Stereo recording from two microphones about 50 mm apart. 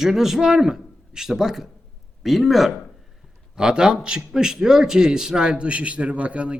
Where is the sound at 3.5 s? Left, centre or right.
Centre.